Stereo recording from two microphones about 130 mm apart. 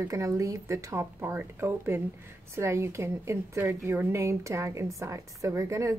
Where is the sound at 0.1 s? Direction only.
25° right (ahead or behind).